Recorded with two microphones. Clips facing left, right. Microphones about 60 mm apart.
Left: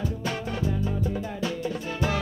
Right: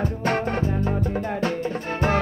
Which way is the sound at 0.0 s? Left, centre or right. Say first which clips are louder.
Right 7 dB; right.